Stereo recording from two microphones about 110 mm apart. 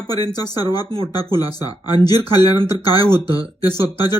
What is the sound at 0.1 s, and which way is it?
Speech, 35° left (ahead or behind).